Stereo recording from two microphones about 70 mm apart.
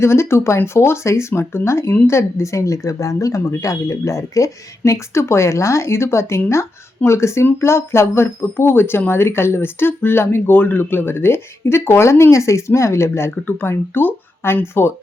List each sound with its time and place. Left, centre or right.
0.0 s speech: left